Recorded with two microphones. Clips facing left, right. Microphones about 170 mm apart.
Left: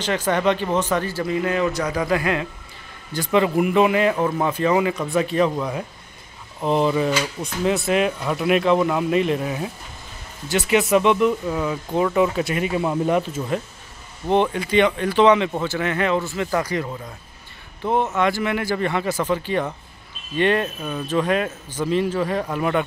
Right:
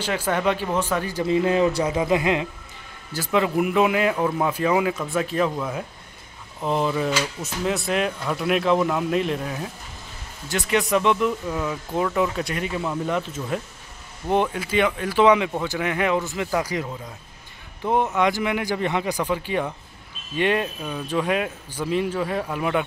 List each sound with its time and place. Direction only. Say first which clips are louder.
0.0 s speech: left 3 dB; 10° right (ahead or behind)
1.2 s speech: right 6 dB; 25° right (ahead or behind)
3.1 s speech: left 3 dB; 5° right (ahead or behind)
12.8 s speech: left 5 dB; 20° left (ahead or behind)
13.5 s speech: left 3 dB; centre (ahead or behind)